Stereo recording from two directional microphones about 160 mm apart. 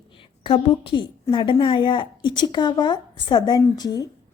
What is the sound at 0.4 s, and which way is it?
A woman's voice, 35° left (ahead or behind).